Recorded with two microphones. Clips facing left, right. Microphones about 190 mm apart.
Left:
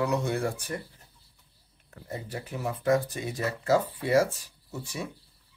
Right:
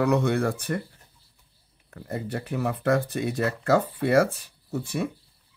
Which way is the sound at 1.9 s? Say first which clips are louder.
Right 6 dB; 60° right (ahead or behind).